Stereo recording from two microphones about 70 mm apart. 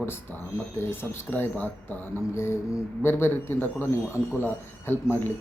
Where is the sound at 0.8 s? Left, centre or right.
Left.